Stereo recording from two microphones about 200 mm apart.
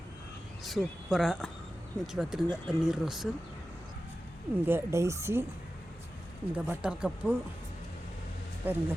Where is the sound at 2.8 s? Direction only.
Centre (ahead or behind).